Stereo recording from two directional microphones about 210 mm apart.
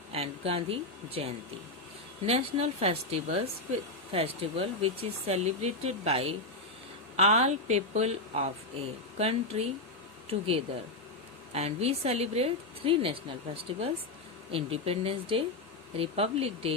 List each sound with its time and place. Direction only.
0.1 s a woman's voice: 30° right (ahead or behind)